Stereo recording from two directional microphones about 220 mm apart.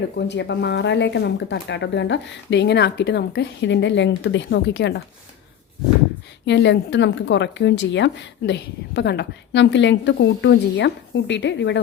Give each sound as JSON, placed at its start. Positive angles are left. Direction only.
{"t": 0.3, "sound": "speech", "side_deg": 50}
{"t": 6.4, "sound": "speech", "side_deg": 55}